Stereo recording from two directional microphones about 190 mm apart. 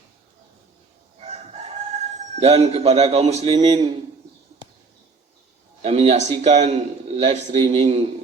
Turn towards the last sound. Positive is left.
turn(degrees=-35)  # may be behind; listen again after turning